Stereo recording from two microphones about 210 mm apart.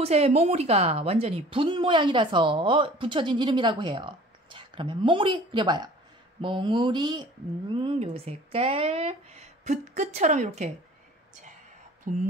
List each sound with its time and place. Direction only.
0.0 s speech: 30° right (ahead or behind)
12.1 s speech: 35° right (ahead or behind)